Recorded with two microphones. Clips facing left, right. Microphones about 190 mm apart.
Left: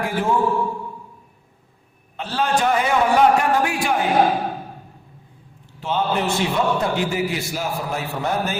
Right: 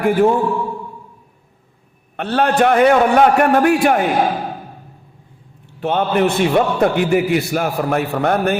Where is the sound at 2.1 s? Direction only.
60° right (ahead or behind).